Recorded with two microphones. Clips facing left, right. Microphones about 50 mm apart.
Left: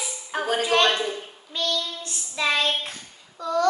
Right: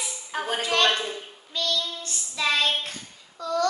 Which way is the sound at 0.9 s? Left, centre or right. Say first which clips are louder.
Left 3 dB; centre.